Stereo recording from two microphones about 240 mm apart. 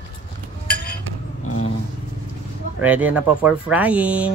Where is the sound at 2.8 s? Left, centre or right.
Centre.